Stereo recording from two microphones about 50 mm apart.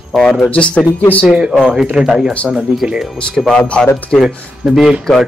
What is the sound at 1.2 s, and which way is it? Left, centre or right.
Speech, right.